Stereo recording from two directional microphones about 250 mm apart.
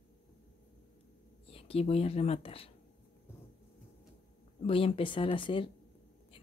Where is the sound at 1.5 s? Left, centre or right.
Left.